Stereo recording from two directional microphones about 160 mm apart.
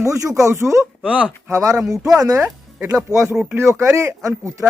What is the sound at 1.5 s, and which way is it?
Speech, 20° right (ahead or behind).